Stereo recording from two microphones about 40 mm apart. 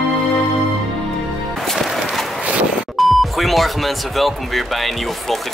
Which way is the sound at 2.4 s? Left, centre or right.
Right.